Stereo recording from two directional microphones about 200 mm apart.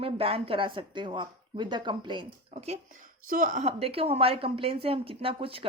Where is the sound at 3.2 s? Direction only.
45° right (ahead or behind); by 5.6 s 25° right (ahead or behind).